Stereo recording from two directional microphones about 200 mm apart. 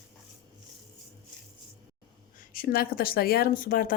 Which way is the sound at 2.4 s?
45° left (ahead or behind).